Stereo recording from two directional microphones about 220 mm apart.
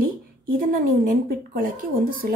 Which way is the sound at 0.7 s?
40° right (ahead or behind).